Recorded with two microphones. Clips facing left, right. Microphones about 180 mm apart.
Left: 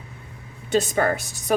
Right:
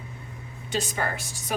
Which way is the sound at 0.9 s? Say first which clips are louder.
Left 8 dB; 50° left (ahead or behind).